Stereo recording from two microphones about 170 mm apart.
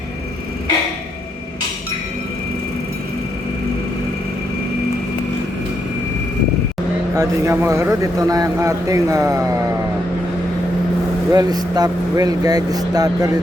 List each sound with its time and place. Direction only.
7.2 s speech: 15° right (ahead or behind)
11.3 s speech: 25° right (ahead or behind)